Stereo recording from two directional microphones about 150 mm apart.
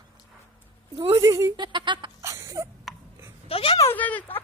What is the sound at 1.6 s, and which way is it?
Speech, 30° right (ahead or behind).